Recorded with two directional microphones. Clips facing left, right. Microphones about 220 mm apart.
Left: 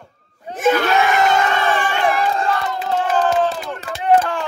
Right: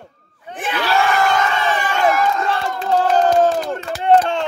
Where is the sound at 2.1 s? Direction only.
30° left (ahead or behind).